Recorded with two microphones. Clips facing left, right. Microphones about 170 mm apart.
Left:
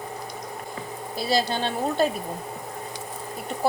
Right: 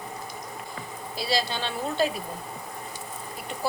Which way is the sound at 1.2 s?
50° left (ahead or behind).